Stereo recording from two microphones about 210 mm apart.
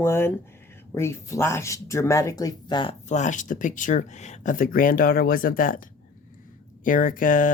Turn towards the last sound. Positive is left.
turn(degrees=40)  # may be behind; listen again after turning